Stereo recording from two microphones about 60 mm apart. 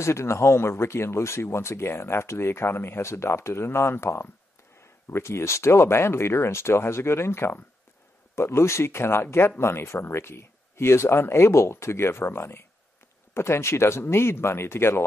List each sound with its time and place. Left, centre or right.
0.0 s speech: left